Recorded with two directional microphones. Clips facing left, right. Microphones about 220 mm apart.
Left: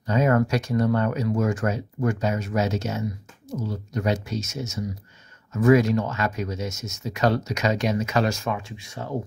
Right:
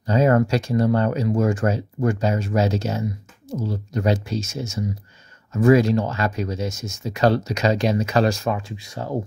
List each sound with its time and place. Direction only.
0.0 s speech: 30° right (ahead or behind)